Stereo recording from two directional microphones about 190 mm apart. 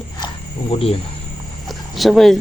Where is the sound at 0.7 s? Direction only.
30° left (ahead or behind).